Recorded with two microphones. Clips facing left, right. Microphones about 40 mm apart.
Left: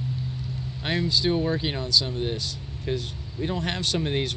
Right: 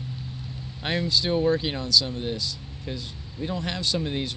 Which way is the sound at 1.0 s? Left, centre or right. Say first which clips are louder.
Right 1 dB; centre.